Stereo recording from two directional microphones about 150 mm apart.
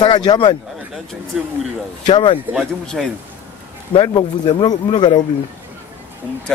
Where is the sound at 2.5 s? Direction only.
Centre (ahead or behind).